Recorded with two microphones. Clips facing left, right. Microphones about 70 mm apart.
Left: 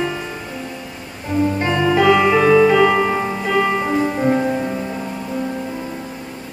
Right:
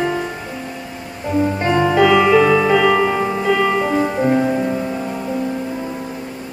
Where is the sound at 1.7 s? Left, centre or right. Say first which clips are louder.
Right 3 dB; right.